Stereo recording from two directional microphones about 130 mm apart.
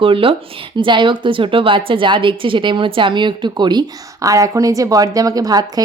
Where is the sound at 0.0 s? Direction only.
45° right (ahead or behind).